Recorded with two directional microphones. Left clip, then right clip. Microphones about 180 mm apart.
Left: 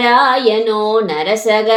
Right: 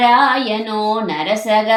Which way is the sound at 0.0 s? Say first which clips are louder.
Left 2 dB; 45° left (ahead or behind).